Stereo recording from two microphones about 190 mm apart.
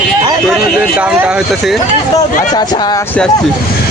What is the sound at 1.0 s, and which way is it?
Speech, 5° right (ahead or behind).